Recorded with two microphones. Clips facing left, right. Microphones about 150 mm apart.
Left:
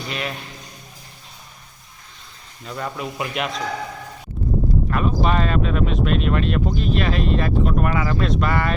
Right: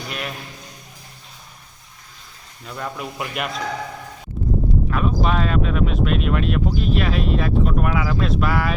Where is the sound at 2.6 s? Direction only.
Centre (ahead or behind).